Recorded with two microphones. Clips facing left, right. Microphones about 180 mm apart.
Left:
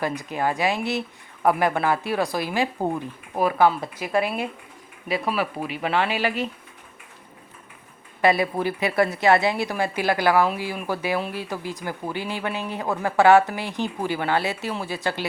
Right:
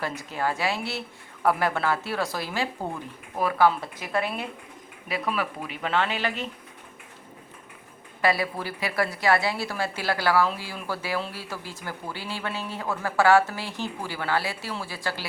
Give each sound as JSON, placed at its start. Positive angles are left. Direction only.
{"t": 0.2, "sound": "a woman's voice", "side_deg": 15}
{"t": 5.0, "sound": "speech", "side_deg": 25}
{"t": 5.8, "sound": "a woman's voice", "side_deg": 10}
{"t": 8.2, "sound": "a woman's voice", "side_deg": 20}